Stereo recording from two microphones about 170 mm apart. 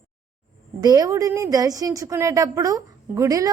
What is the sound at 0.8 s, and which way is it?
A woman's voice, 25° right (ahead or behind).